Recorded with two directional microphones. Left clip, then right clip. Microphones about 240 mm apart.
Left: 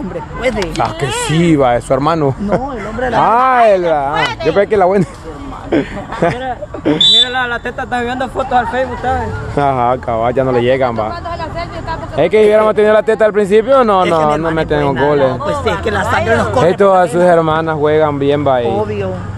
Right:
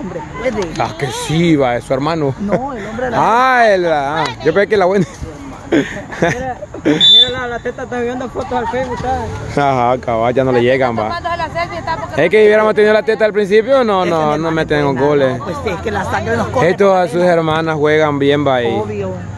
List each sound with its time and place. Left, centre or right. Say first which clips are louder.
1.3 s speech: left 2 dB; centre
3.2 s speech: left 1 dB; centre
7.2 s speech: right 1 dB; left
9.6 s speech: even; centre
11.2 s a sound: right 3 dB; right
12.2 s speech: left 1 dB; centre
15.4 s speech: left 5 dB; centre
16.6 s speech: left 1 dB; centre